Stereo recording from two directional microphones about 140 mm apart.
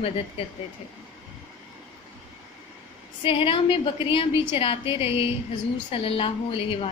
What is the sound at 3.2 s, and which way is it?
A woman's voice, 40° left (ahead or behind).